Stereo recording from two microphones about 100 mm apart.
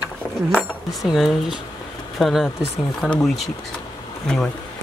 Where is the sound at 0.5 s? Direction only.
Centre (ahead or behind).